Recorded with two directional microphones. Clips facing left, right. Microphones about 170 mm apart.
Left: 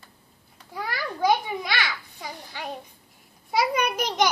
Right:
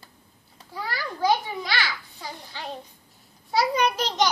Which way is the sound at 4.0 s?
10° left (ahead or behind).